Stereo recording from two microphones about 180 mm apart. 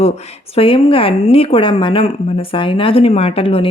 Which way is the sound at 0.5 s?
30° left (ahead or behind).